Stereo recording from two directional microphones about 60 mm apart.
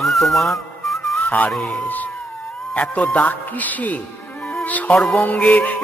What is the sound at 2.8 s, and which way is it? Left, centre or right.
Music, left.